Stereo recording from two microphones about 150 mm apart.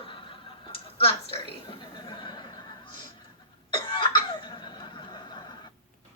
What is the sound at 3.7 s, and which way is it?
Cough, 35° left (ahead or behind).